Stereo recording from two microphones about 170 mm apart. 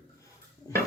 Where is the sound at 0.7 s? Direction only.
20° left (ahead or behind).